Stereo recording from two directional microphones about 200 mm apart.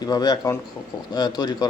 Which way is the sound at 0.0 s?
20° left (ahead or behind).